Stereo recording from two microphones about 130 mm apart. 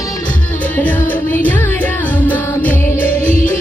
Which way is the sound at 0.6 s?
10° left (ahead or behind).